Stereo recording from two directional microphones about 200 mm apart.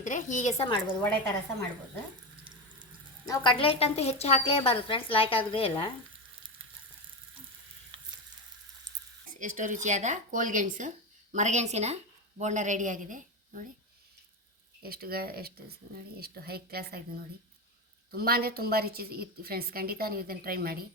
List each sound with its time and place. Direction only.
0.0 s a woman's voice: 40° left (ahead or behind)
3.2 s a woman's voice: 20° left (ahead or behind)
9.4 s speech: 40° right (ahead or behind)
14.8 s a woman's voice: 50° right (ahead or behind)
18.1 s a woman's voice: 50° right (ahead or behind)